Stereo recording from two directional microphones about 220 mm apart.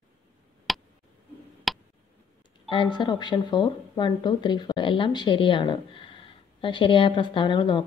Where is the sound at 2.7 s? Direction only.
20° left (ahead or behind).